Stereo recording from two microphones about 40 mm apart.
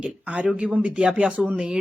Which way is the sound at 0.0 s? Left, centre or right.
Right.